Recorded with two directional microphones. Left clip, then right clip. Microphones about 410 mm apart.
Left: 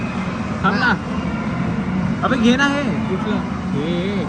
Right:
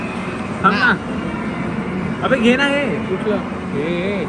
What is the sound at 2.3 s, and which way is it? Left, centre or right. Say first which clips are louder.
Speech: right 2 dB; right.